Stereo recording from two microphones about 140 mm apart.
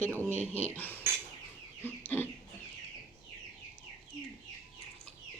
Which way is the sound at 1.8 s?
15° left (ahead or behind).